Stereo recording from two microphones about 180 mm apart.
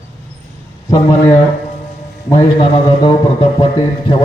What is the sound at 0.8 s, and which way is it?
A man's voice, 25° left (ahead or behind).